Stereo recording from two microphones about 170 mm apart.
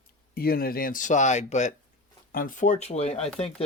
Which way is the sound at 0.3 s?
60° left (ahead or behind).